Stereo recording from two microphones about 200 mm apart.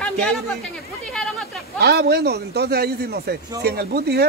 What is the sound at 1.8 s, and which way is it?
A man's voice, 55° right (ahead or behind).